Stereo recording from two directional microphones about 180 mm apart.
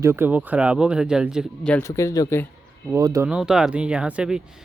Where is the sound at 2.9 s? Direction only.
20° right (ahead or behind).